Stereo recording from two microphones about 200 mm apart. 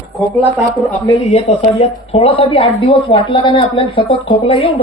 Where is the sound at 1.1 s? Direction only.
30° left (ahead or behind).